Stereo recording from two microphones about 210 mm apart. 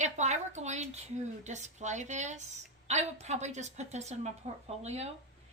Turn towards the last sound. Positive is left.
turn(degrees=-30)  # may be behind; listen again after turning